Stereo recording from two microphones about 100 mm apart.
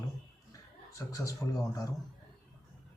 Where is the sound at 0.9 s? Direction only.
35° left (ahead or behind).